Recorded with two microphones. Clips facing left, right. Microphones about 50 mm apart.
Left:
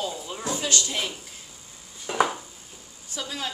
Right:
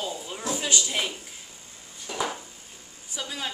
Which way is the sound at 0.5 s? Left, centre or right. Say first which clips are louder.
Even; centre.